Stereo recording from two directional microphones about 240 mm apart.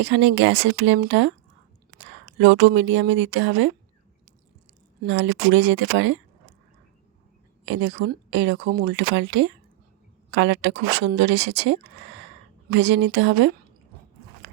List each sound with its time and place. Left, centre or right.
0.0 s speech: right
5.0 s speech: right
7.6 s speech: right
14.4 s a sound: right